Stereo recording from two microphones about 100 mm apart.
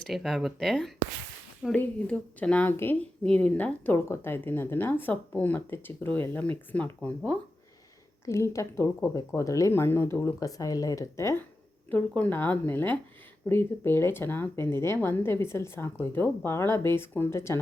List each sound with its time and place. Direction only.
0.1 s speech: centre (ahead or behind)
1.7 s speech: 15° left (ahead or behind)
3.9 s speech: 25° left (ahead or behind)
8.2 s speech: 30° left (ahead or behind)
11.9 s speech: 15° left (ahead or behind)